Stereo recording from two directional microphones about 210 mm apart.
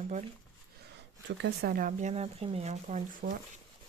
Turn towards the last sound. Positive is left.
turn(degrees=-40)  # may be behind; listen again after turning